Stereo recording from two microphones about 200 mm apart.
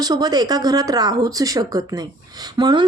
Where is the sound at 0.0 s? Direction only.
20° right (ahead or behind).